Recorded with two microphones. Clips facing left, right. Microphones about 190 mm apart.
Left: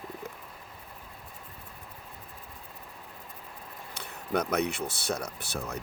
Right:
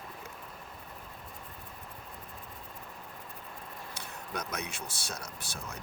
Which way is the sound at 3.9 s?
60° left (ahead or behind).